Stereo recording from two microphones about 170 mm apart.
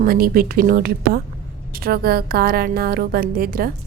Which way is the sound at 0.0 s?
60° right (ahead or behind).